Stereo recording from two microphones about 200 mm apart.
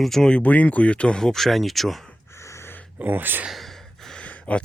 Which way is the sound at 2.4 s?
15° left (ahead or behind).